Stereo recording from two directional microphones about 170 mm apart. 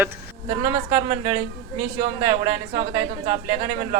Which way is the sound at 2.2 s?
30° right (ahead or behind).